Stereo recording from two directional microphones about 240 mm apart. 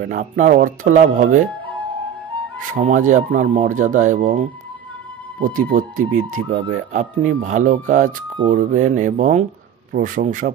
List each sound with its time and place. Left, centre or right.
0.1 s speech: right
2.8 s speech: right